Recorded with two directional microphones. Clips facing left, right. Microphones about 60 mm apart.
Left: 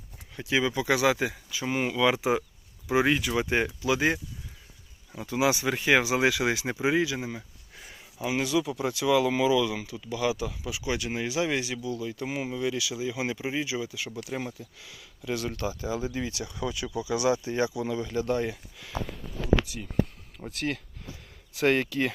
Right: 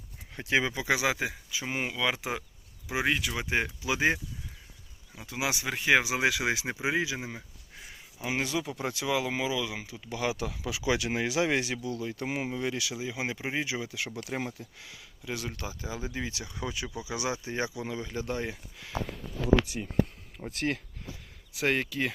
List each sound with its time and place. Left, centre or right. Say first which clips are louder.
0.3 s speech: left 1 dB; right
0.7 s speech: left 4 dB; centre
2.0 s speech: left 9 dB; centre
3.8 s speech: left 2 dB; centre
5.1 s speech: left 7 dB; centre
8.2 s speech: left 4 dB; right
9.1 s speech: left 8 dB; centre
10.0 s speech: left 3 dB; right
10.3 s speech: left 2 dB; right
10.6 s speech: right 2 dB; right
11.3 s speech: left 1 dB; right
13.0 s speech: left 3 dB; right
15.2 s speech: left 6 dB; centre
21.5 s speech: left 4 dB; centre